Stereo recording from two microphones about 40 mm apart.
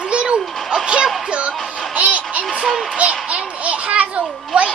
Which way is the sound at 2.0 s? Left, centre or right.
Right.